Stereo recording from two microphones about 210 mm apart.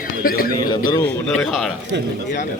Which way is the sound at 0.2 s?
45° left (ahead or behind).